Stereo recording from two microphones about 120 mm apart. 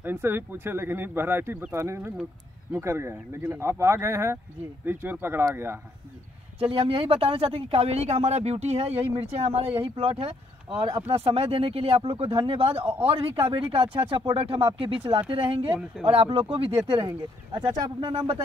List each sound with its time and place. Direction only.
0.0 s speech: 20° right (ahead or behind)
6.6 s speech: 50° right (ahead or behind)